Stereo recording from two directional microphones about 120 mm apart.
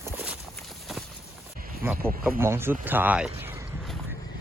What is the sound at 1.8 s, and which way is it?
Speech, 15° right (ahead or behind).